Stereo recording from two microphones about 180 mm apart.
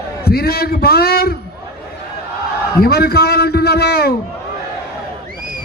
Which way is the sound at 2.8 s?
60° left (ahead or behind).